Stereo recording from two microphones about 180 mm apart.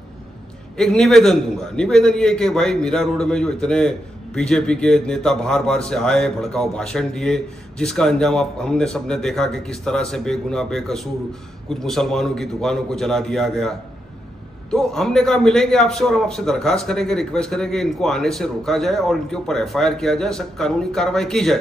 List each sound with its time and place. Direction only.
0.7 s a man's voice: 5° left (ahead or behind)